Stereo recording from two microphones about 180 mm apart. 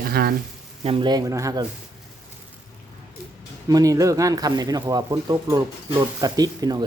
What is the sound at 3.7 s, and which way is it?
A man's voice, 20° right (ahead or behind).